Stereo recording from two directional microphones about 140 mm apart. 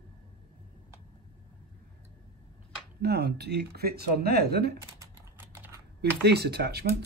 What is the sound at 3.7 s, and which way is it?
Speech, 90° right.